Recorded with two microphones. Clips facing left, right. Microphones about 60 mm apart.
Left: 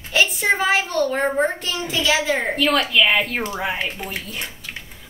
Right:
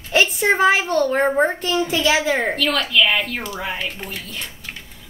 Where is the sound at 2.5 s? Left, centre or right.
Centre.